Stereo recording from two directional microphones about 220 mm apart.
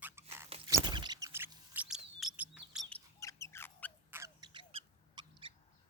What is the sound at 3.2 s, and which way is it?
Rodents, 15° left (ahead or behind).